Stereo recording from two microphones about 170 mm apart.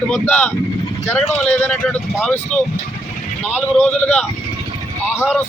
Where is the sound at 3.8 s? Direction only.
5° left (ahead or behind).